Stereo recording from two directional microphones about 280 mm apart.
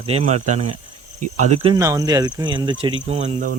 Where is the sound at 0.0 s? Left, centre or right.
Right.